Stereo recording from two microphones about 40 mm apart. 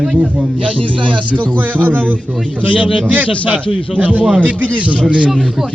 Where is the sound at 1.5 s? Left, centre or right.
Right.